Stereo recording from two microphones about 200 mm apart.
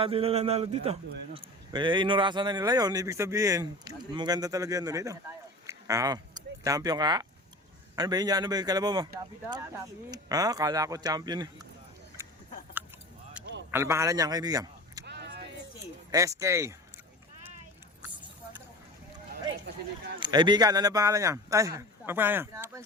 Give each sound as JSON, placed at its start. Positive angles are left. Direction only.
{"t": 0.0, "sound": "speech", "side_deg": -30}
{"t": 13.7, "sound": "speech", "side_deg": -15}
{"t": 15.0, "sound": "a sound", "side_deg": -55}
{"t": 16.1, "sound": "speech", "side_deg": -15}
{"t": 19.3, "sound": "speech", "side_deg": -55}
{"t": 20.1, "sound": "speech", "side_deg": -20}